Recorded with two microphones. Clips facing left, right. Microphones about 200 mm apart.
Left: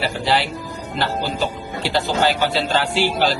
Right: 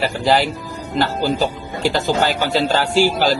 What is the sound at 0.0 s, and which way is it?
Speech, 45° right (ahead or behind).